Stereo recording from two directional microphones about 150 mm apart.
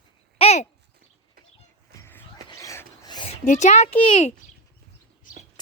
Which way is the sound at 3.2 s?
55° left (ahead or behind).